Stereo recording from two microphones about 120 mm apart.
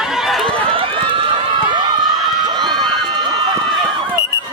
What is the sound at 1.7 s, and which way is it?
Run, 40° right (ahead or behind).